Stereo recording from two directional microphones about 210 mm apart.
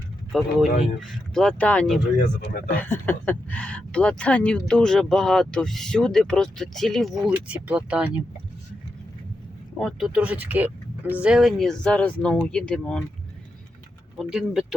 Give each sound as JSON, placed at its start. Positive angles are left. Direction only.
{"t": 0.3, "sound": "speech", "side_deg": 0}
{"t": 2.1, "sound": "speech", "side_deg": 45}
{"t": 2.6, "sound": "speech", "side_deg": 10}
{"t": 9.7, "sound": "speech", "side_deg": 0}
{"t": 14.2, "sound": "speech", "side_deg": 0}